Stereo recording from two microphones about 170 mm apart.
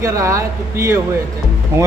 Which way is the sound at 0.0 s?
15° right (ahead or behind).